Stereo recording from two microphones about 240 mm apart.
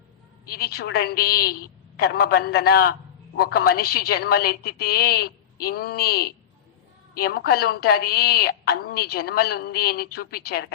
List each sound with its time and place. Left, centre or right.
0.4 s a woman's voice: left